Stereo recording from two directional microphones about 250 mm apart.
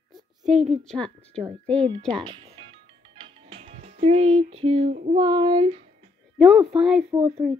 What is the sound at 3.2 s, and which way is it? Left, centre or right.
Music, right.